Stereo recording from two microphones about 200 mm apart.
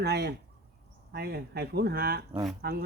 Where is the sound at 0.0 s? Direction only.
55° right (ahead or behind).